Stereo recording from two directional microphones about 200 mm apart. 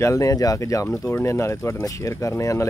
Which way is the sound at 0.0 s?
15° left (ahead or behind).